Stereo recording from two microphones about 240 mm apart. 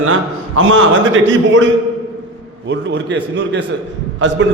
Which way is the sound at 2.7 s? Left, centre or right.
Right.